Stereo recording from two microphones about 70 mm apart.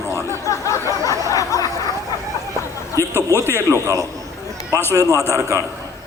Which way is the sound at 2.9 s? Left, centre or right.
Left.